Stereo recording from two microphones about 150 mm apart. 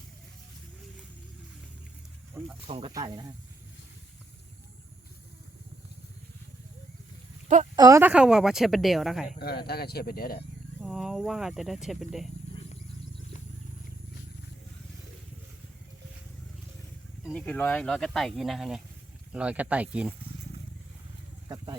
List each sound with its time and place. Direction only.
2.6 s speech: 40° right (ahead or behind)
2.9 s speech: 25° right (ahead or behind)
7.4 s a sound: 50° right (ahead or behind)
7.8 s speech: 20° right (ahead or behind)
8.1 s speech: 5° right (ahead or behind)
9.4 s speech: 90° left
10.8 s speech: centre (ahead or behind)
17.2 s speech: 5° left (ahead or behind); by 20.1 s 10° right (ahead or behind)